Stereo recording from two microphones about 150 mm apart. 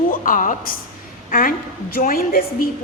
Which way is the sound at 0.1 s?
65° left (ahead or behind).